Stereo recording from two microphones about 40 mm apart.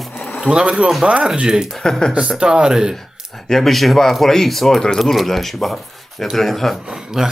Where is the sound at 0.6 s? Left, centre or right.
Right.